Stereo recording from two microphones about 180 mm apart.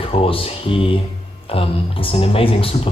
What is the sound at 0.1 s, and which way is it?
Speech, 30° left (ahead or behind).